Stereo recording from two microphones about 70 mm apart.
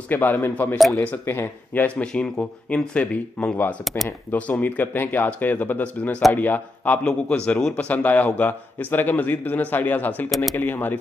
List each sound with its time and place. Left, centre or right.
0.1 s speech: left